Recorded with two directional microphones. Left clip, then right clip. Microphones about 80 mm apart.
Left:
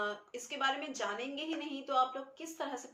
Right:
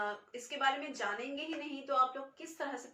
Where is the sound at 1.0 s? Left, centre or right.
Left.